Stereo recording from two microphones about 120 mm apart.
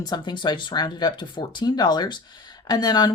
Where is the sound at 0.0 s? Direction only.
35° left (ahead or behind).